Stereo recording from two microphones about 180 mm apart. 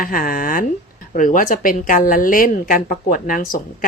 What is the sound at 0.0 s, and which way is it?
A woman's voice, 50° left (ahead or behind).